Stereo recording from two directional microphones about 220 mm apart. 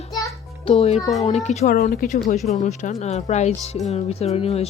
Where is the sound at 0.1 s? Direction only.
15° left (ahead or behind).